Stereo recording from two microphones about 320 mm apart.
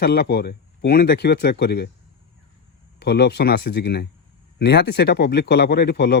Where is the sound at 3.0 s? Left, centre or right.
Left.